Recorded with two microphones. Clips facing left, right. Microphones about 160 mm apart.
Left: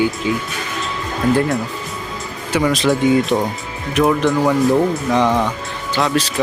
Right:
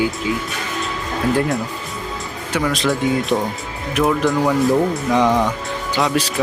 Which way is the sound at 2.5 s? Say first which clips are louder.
Left 3 dB; centre (ahead or behind).